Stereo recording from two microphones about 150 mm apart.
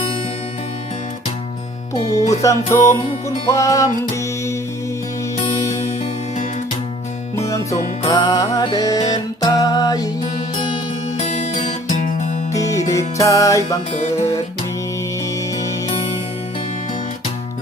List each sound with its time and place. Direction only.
2.4 s music: 20° left (ahead or behind)
7.3 s music: 20° left (ahead or behind)
11.2 s music: 50° left (ahead or behind)
12.5 s music: 20° left (ahead or behind)
13.9 s music: 45° left (ahead or behind)